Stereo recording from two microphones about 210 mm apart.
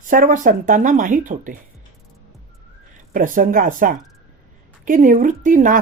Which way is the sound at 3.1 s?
40° right (ahead or behind).